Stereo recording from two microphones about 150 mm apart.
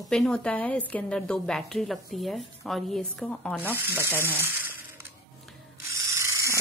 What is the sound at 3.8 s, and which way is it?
Speech, 15° right (ahead or behind).